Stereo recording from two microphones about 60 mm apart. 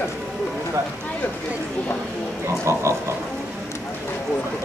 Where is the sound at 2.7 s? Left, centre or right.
Right.